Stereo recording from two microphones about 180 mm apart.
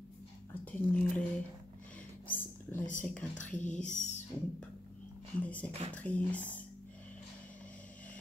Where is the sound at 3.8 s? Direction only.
40° left (ahead or behind).